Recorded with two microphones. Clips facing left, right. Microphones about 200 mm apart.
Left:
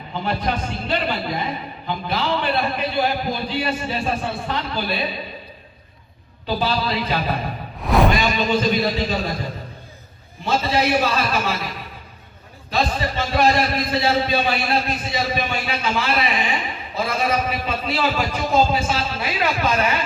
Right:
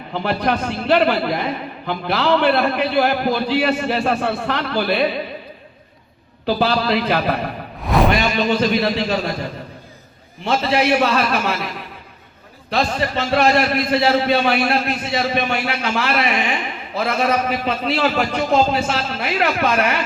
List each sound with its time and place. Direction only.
0.1 s a man's voice: 70° right (ahead or behind)
6.4 s a man's voice: 70° right (ahead or behind)
7.9 s a sound: centre (ahead or behind)
8.1 s a man's voice: 65° right (ahead or behind)
10.4 s a man's voice: 65° right (ahead or behind)
12.7 s a man's voice: 65° right (ahead or behind)